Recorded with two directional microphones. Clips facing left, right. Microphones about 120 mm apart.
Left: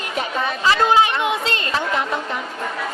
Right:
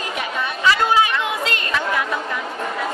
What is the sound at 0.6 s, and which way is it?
Chatter, 30° left (ahead or behind).